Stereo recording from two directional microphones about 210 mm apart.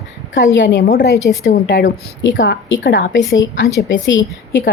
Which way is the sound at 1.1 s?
15° left (ahead or behind).